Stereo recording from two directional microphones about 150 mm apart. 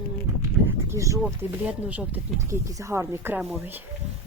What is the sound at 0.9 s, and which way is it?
Speech, 20° right (ahead or behind).